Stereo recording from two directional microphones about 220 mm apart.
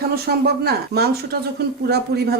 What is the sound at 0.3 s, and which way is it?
Speech, 45° right (ahead or behind).